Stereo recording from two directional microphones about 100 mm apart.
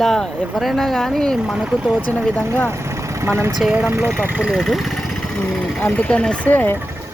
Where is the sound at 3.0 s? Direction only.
25° right (ahead or behind).